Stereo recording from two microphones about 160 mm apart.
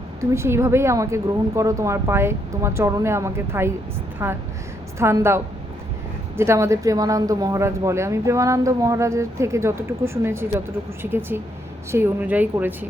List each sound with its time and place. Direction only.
0.2 s a woman's voice: 15° right (ahead or behind)